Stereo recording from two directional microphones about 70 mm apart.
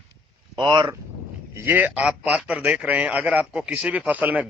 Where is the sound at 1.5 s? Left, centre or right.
Right.